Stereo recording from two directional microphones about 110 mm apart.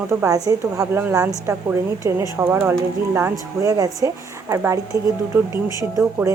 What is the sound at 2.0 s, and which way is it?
Speech, 30° right (ahead or behind).